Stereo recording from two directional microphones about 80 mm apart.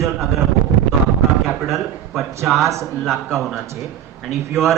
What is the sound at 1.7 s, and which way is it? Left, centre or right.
A man's voice, centre.